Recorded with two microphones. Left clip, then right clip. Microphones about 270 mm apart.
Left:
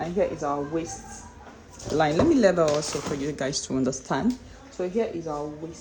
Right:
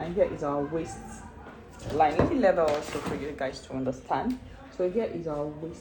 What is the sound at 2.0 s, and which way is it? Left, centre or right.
Speech, left.